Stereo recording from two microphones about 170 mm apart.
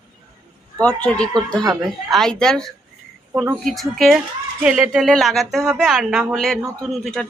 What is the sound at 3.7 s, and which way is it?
A woman's voice, centre (ahead or behind).